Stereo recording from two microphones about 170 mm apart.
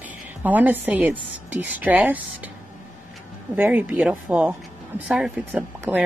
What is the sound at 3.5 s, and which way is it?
A woman's voice, 10° right (ahead or behind).